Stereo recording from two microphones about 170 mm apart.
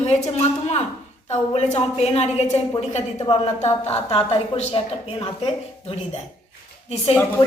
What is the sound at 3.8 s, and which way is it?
A woman's voice, 35° left (ahead or behind).